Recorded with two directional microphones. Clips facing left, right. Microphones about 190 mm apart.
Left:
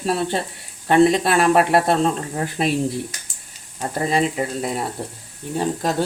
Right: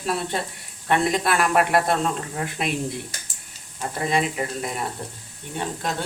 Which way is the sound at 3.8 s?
35° left (ahead or behind).